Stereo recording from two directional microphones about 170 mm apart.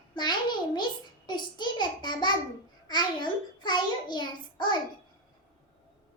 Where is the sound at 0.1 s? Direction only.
25° left (ahead or behind).